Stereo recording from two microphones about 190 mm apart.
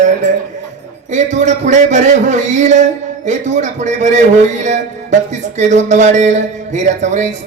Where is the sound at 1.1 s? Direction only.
40° right (ahead or behind).